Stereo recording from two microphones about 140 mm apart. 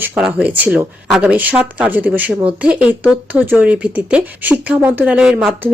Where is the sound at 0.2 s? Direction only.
10° right (ahead or behind).